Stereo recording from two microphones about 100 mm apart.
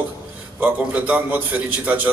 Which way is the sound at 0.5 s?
15° right (ahead or behind).